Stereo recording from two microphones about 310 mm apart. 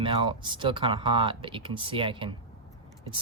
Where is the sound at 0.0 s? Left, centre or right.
Centre.